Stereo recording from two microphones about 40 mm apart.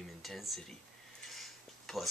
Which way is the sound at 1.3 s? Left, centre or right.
Centre.